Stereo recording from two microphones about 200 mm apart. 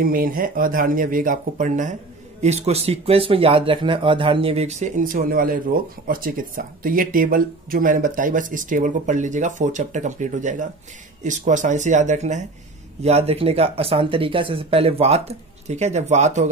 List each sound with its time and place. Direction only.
0.0 s speech: 45° right (ahead or behind)